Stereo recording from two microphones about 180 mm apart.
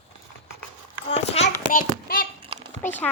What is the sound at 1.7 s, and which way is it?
Child singing, 50° left (ahead or behind).